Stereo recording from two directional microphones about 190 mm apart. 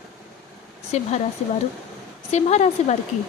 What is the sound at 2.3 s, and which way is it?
Speech, 35° left (ahead or behind).